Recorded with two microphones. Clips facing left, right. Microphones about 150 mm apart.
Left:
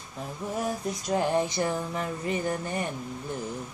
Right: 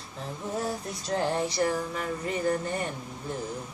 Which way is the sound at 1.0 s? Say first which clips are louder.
Left 2 dB; 15° left (ahead or behind).